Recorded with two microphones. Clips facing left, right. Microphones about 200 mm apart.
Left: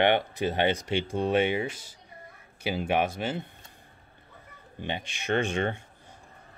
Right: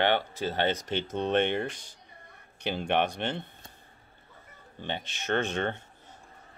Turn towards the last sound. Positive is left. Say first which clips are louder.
# left 2 dB
turn(degrees=10)  # may be behind; listen again after turning